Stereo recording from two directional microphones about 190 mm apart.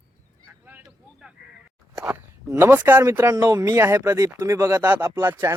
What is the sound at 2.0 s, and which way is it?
Speech, 15° right (ahead or behind).